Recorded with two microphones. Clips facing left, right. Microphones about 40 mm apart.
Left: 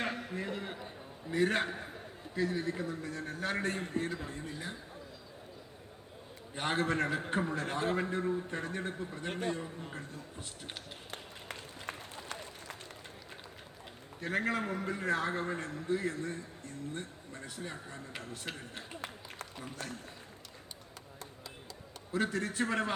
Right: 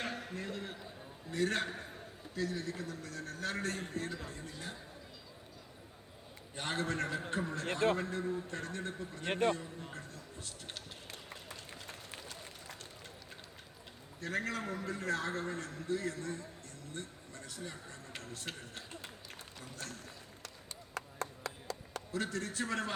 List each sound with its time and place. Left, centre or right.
0.2 s a sound: centre
0.4 s a sound: left
1.3 s a man's voice: left
6.6 s a man's voice: left
9.2 s a man's voice: right
10.4 s a man's voice: left
11.1 s run: left
14.2 s a man's voice: left
16.9 s a sound: left
19.5 s a sound: left
20.9 s chop: right
22.1 s a man's voice: left